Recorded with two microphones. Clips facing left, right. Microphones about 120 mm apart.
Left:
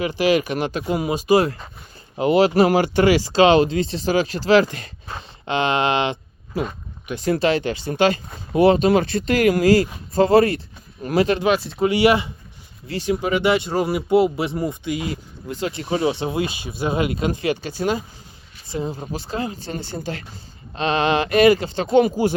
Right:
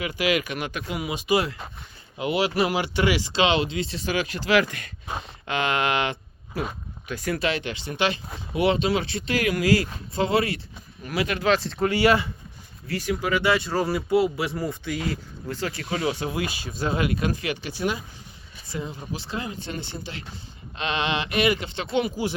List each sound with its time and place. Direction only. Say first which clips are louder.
0.0 s speech: left 6 dB; 35° left (ahead or behind)
11.3 s speech: left 3 dB; 15° left (ahead or behind); by 22.4 s 45° left (ahead or behind)